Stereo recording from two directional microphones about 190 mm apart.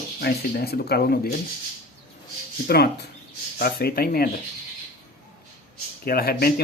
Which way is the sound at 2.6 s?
55° left (ahead or behind).